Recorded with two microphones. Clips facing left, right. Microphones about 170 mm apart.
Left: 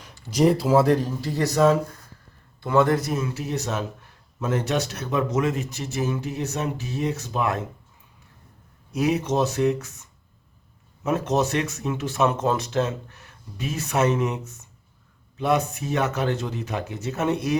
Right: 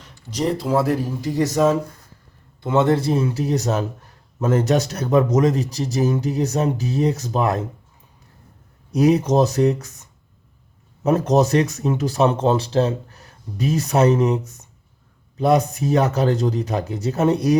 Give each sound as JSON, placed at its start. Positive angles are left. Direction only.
{"t": 0.0, "sound": "speech", "side_deg": 10}
{"t": 8.9, "sound": "speech", "side_deg": -35}
{"t": 11.0, "sound": "speech", "side_deg": -35}